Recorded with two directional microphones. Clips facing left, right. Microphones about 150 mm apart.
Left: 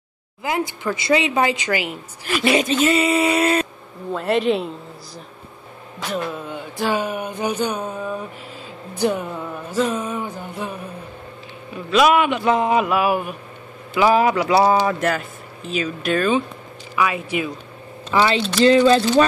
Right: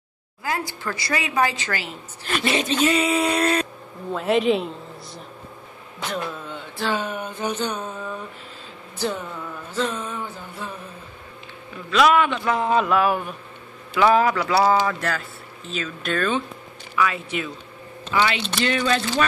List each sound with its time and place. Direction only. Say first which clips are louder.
0.4 s a woman's voice: left 4 dB; 20° left (ahead or behind); by 4.6 s centre (ahead or behind)
6.0 s a woman's voice: left 3 dB; 10° left (ahead or behind)
8.9 s music: left 6 dB; 15° left (ahead or behind)
9.7 s a sound: left 5 dB; 10° left (ahead or behind)
11.7 s a woman's voice: left 2 dB; 20° left (ahead or behind)
18.1 s speech: left 4 dB; 30° left (ahead or behind)